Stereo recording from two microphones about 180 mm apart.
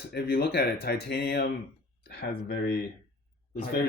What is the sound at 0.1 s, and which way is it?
Speech, 65° left (ahead or behind).